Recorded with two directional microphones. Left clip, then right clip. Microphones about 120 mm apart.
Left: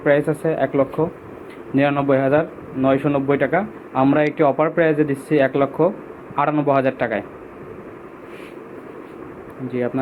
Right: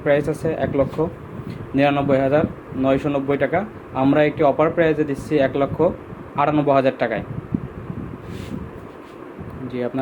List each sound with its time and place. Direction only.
0.0 s a man's voice: 20° right (ahead or behind)
9.7 s speech: 20° right (ahead or behind)